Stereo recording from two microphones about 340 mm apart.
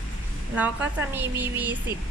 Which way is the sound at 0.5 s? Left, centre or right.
Centre.